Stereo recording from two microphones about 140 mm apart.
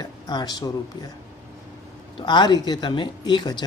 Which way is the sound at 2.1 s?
30° left (ahead or behind).